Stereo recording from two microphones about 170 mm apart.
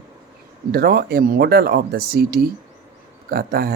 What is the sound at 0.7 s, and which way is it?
Speech, 65° right (ahead or behind).